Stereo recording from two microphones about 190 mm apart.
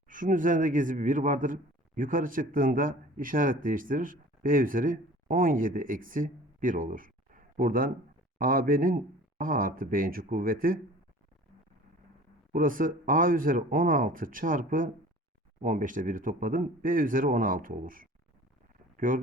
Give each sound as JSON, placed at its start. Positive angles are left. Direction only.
{"t": 0.1, "sound": "speech", "side_deg": -45}
{"t": 12.5, "sound": "speech", "side_deg": -45}